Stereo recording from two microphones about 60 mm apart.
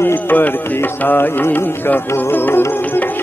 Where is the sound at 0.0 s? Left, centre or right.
Left.